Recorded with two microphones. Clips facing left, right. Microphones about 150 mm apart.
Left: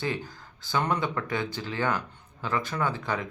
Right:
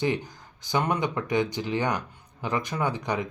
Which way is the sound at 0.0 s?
15° right (ahead or behind).